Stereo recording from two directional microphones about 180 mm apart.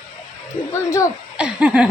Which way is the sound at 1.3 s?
5° right (ahead or behind).